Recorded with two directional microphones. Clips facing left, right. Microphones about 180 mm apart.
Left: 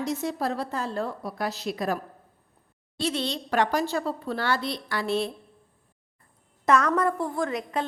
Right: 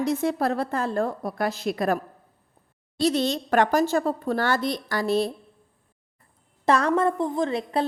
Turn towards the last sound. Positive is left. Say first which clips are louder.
# right 3 dB
turn(degrees=-30)  # may be behind; listen again after turning